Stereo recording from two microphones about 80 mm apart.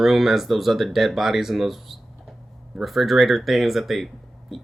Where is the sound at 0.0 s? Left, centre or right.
Centre.